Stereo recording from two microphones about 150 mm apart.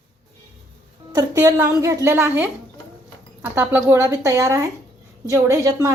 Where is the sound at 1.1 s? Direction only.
25° right (ahead or behind).